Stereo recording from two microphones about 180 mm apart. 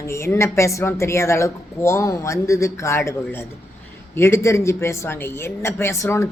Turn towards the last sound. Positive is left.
turn(degrees=15)  # may be behind; listen again after turning